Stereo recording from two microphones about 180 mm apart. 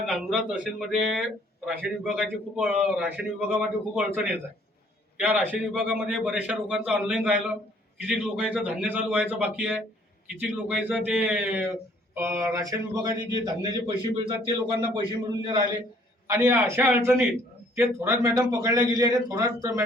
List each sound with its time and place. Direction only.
0.1 s a man's voice: centre (ahead or behind)